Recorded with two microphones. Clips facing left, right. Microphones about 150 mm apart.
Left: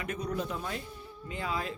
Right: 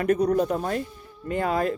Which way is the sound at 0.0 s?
45° right (ahead or behind).